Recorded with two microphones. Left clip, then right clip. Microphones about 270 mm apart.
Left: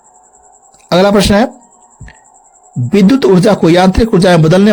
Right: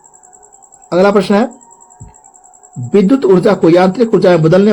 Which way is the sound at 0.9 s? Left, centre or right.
Left.